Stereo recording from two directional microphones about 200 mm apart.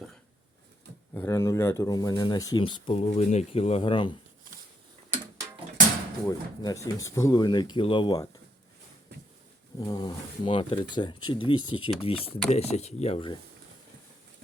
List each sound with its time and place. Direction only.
1.1 s speech: 15° left (ahead or behind)
6.2 s speech: 20° left (ahead or behind)
9.7 s speech: 20° left (ahead or behind)